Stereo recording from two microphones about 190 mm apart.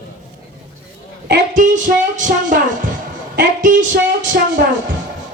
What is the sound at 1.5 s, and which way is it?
Music, 40° right (ahead or behind).